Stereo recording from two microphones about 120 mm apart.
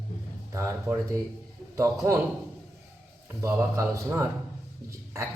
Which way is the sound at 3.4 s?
20° right (ahead or behind).